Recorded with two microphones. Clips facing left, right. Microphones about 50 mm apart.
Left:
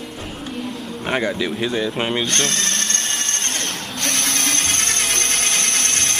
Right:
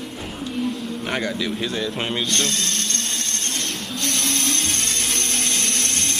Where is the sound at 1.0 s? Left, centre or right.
Centre.